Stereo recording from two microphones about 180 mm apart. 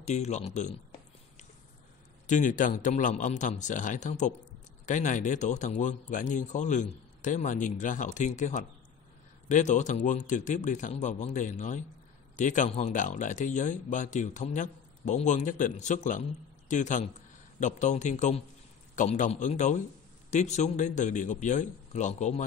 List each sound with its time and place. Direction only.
0.0 s a man's voice: 40° left (ahead or behind)
2.2 s a man's voice: 45° left (ahead or behind)